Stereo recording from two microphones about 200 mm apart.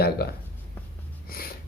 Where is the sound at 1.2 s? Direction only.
50° left (ahead or behind).